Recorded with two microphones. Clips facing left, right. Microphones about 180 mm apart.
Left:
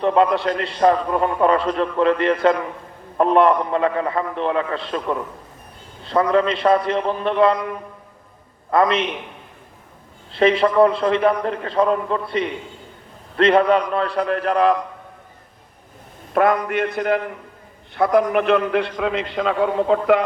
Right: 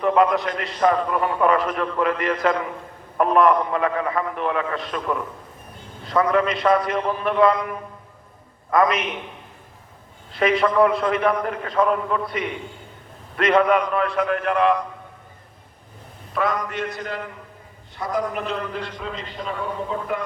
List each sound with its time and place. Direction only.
0.0 s a man's voice: 30° left (ahead or behind)
8.7 s a man's voice: 30° left (ahead or behind)
10.3 s a man's voice: 30° left (ahead or behind)
13.3 s a man's voice: 30° left (ahead or behind)
16.3 s a man's voice: 55° left (ahead or behind); by 20.2 s 85° left